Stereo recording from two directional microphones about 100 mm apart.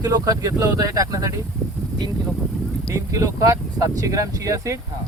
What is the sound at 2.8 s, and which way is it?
Speech, 35° right (ahead or behind).